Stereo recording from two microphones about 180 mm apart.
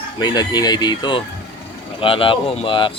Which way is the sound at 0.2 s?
20° left (ahead or behind).